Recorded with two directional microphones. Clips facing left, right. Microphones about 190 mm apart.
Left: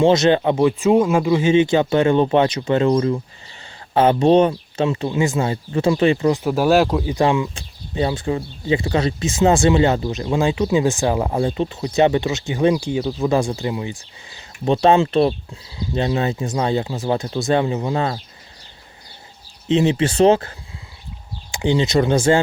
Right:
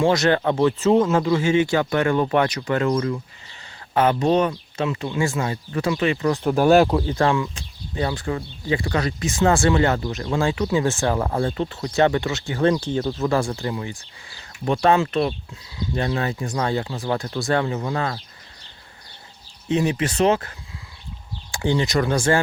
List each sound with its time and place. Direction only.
0.0 s speech: 20° left (ahead or behind)
6.4 s speech: centre (ahead or behind)
7.0 s speech: 15° left (ahead or behind)
13.2 s speech: 15° left (ahead or behind)
19.6 s speech: 25° left (ahead or behind)
21.5 s speech: 20° left (ahead or behind)